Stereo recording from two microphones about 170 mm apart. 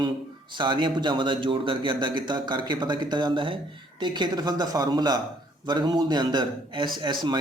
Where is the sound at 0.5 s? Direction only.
25° right (ahead or behind).